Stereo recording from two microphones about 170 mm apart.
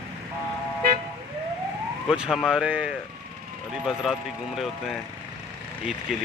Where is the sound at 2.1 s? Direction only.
5° right (ahead or behind).